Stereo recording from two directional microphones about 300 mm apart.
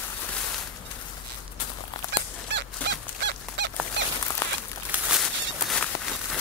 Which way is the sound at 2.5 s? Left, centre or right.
Right.